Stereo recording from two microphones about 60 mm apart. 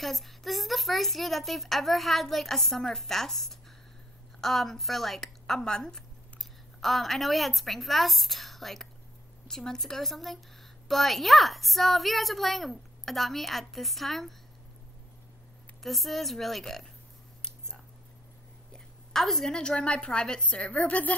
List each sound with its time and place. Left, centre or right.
0.0 s a woman's voice: centre
15.8 s a woman's voice: centre
17.4 s a sound: centre
18.7 s a woman's voice: centre; by 21.1 s left